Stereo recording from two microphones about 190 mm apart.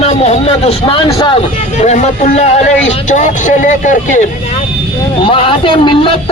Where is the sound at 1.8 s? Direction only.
35° left (ahead or behind).